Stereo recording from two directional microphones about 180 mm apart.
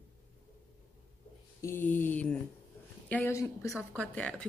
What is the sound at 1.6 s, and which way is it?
A woman's voice, 15° left (ahead or behind).